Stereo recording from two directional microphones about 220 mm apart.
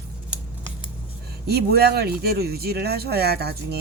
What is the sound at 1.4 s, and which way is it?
Speech, 45° right (ahead or behind).